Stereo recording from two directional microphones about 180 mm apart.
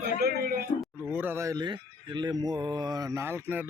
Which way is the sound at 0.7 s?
40° left (ahead or behind).